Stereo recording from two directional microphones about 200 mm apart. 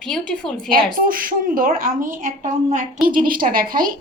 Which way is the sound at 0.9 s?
45° right (ahead or behind).